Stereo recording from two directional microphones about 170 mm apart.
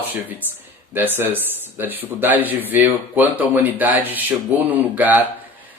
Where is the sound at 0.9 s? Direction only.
10° right (ahead or behind).